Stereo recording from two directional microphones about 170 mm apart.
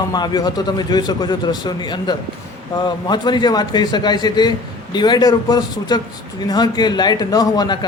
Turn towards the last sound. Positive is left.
turn(degrees=25)  # may be behind; listen again after turning